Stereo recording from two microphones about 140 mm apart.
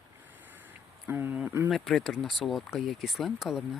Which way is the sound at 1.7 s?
Centre (ahead or behind).